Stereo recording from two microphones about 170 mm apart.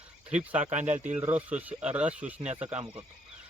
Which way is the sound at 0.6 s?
45° right (ahead or behind).